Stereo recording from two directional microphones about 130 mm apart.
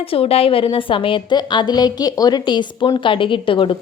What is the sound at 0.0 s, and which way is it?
A woman's voice, 50° left (ahead or behind).